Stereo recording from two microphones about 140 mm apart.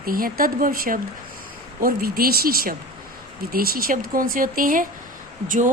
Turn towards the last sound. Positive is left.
turn(degrees=-70)  # may be behind; listen again after turning